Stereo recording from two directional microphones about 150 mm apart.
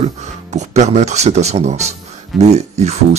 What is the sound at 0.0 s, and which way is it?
Speech, 50° right (ahead or behind).